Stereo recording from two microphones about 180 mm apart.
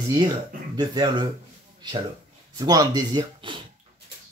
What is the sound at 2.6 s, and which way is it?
Speech, 20° right (ahead or behind).